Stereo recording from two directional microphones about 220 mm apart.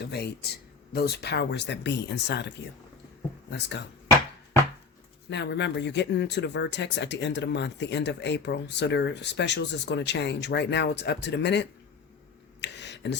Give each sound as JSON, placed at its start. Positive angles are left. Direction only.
{"t": 0.0, "sound": "speech", "side_deg": 45}
{"t": 3.5, "sound": "speech", "side_deg": 50}
{"t": 5.3, "sound": "speech", "side_deg": 50}
{"t": 12.5, "sound": "a sound", "side_deg": 50}